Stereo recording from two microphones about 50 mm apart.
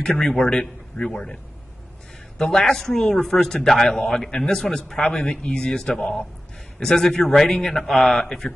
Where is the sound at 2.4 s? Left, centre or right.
Centre.